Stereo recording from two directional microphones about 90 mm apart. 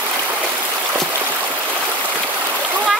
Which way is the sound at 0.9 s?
30° right (ahead or behind).